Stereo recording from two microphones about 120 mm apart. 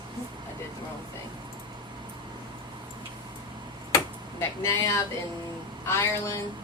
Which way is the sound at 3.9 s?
25° left (ahead or behind).